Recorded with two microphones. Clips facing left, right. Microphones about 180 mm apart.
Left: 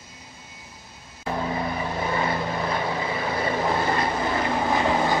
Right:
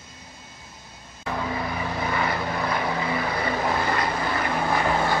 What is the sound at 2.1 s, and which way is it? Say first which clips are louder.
Vehicle: left 1 dB; 25° left (ahead or behind).